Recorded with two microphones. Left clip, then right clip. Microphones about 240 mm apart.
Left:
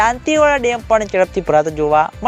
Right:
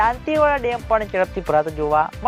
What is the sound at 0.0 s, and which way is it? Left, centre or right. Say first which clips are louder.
Speech: left 4 dB; left.